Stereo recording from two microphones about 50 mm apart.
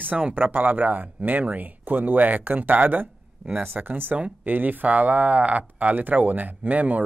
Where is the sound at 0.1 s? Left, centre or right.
Right.